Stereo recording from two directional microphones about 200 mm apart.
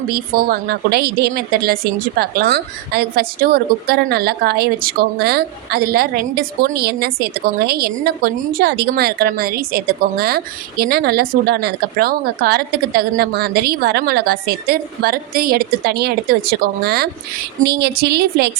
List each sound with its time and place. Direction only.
0.1 s a woman's voice: 45° right (ahead or behind)